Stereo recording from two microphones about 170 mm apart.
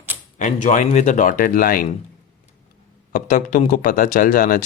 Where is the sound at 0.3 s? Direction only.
45° left (ahead or behind).